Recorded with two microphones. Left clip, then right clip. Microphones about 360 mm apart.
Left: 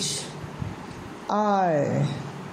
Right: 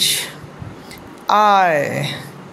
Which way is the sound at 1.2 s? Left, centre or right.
Right.